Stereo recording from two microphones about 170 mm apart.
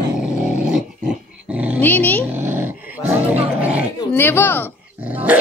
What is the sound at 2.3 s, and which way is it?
Dog, 15° right (ahead or behind).